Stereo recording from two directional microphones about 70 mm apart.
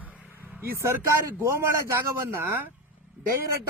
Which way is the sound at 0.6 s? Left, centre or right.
Right.